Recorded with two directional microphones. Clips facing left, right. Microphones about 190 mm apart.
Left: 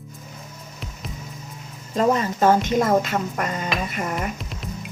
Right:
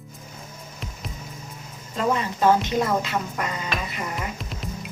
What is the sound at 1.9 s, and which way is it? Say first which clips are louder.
Speech: left 4 dB; 40° left (ahead or behind).